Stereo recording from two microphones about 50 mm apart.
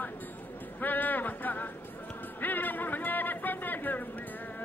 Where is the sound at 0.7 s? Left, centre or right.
Left.